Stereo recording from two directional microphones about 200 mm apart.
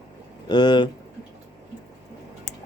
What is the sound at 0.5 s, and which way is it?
Speech, 20° left (ahead or behind).